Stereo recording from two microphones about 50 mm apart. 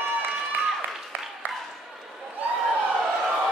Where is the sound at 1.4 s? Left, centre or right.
Right.